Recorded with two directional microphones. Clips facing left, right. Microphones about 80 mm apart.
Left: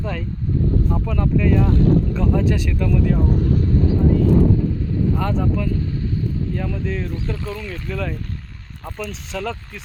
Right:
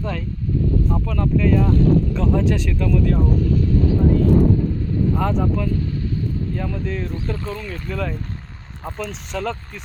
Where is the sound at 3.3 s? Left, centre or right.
Left.